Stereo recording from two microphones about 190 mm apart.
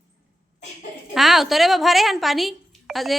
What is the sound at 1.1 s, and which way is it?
A woman's voice, centre (ahead or behind).